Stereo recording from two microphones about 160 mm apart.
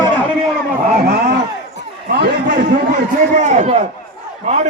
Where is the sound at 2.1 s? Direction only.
90° right.